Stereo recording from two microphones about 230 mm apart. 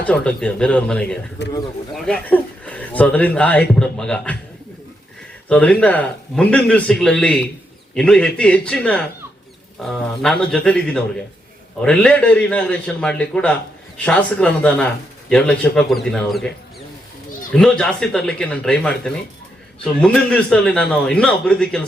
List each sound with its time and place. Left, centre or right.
0.0 s speech: centre
1.4 s speech: left
2.0 s speech: centre
5.5 s speech: centre
17.5 s speech: centre